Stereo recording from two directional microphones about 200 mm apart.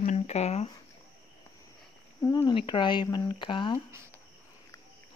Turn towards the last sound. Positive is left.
turn(degrees=25)  # may be behind; listen again after turning